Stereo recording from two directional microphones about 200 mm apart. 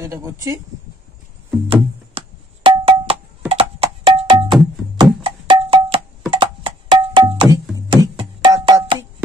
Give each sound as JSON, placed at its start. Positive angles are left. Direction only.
{"t": 0.0, "sound": "speech", "side_deg": -15}
{"t": 1.7, "sound": "music", "side_deg": -30}